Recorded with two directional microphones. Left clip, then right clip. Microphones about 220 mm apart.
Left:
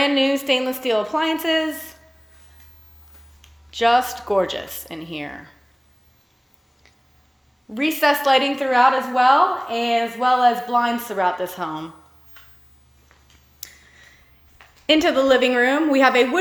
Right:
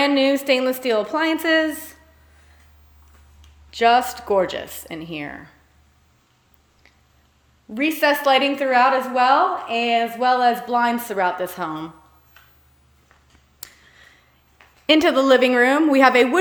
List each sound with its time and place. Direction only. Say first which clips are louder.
0.0 s a woman's voice: right 1 dB; 20° right (ahead or behind)
3.7 s a woman's voice: right 1 dB; 20° right (ahead or behind)
7.7 s a woman's voice: even; 10° right (ahead or behind)
13.6 s a sound: left 1 dB; 15° right (ahead or behind)
14.8 s a woman's voice: right 1 dB; 20° right (ahead or behind)